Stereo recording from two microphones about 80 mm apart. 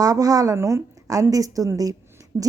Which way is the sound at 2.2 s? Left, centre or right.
Right.